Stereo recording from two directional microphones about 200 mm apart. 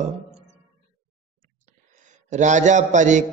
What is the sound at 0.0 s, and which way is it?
Music, 35° right (ahead or behind).